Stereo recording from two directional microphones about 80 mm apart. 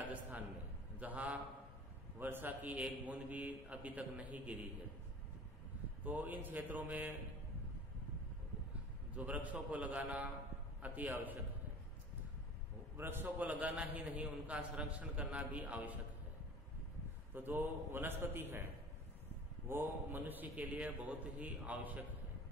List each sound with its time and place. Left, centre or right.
0.0 s a sound: centre
0.9 s a man's voice: centre
6.0 s a man's voice: right
9.1 s a man's voice: centre
12.9 s a man's voice: right
17.3 s a man's voice: right
19.7 s a man's voice: right